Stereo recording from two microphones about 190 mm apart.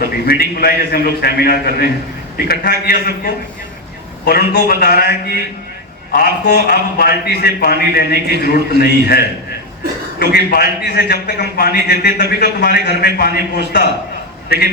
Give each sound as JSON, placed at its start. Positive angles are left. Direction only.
{"t": 0.0, "sound": "a man's voice", "side_deg": 55}
{"t": 10.3, "sound": "a man's voice", "side_deg": 55}